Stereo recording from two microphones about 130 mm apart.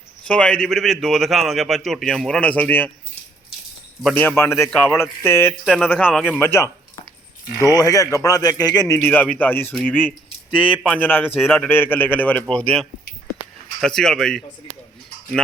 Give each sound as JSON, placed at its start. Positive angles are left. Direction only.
{"t": 0.3, "sound": "a man's voice", "side_deg": 5}
{"t": 4.1, "sound": "a man's voice", "side_deg": 15}
{"t": 5.6, "sound": "a man's voice", "side_deg": -5}
{"t": 6.4, "sound": "a man's voice", "side_deg": 15}
{"t": 7.6, "sound": "speech", "side_deg": 30}
{"t": 9.0, "sound": "a man's voice", "side_deg": 15}
{"t": 11.3, "sound": "a man's voice", "side_deg": -5}
{"t": 11.7, "sound": "a man's voice", "side_deg": 15}